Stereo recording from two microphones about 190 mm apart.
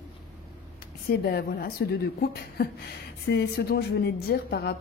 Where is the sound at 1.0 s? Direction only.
55° left (ahead or behind).